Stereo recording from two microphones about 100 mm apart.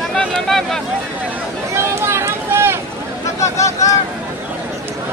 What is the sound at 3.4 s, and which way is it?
Vehicle, 30° left (ahead or behind).